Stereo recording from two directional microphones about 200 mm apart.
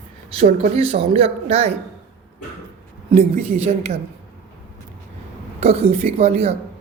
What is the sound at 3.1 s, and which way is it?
Speech, 30° right (ahead or behind).